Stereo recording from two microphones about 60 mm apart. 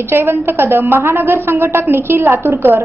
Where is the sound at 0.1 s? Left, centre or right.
Right.